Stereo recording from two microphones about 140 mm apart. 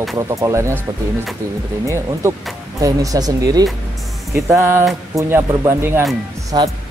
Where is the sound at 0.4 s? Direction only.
20° right (ahead or behind).